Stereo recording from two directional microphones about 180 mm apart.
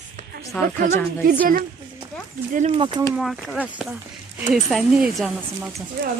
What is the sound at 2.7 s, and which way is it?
Speech, 30° right (ahead or behind).